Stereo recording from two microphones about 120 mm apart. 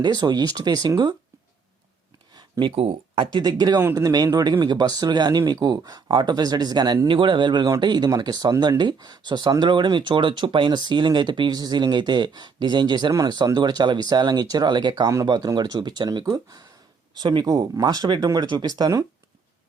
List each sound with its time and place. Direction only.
0.0 s speech: 35° right (ahead or behind)
2.3 s a sound: 45° right (ahead or behind)
3.3 s speech: 35° right (ahead or behind)
17.2 s speech: 40° right (ahead or behind)